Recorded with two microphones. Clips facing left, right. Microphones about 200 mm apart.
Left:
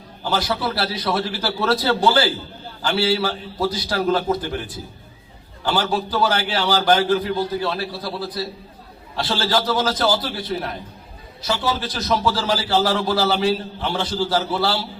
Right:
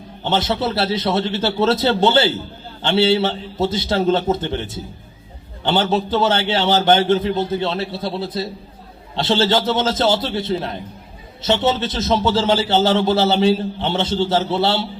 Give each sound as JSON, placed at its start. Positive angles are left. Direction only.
{"t": 0.2, "sound": "a man's voice", "side_deg": -25}